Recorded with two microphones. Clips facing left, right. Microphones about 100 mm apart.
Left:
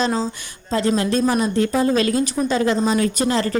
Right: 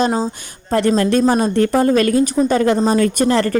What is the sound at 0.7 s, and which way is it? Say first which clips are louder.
Speech: right 4 dB; 55° right (ahead or behind).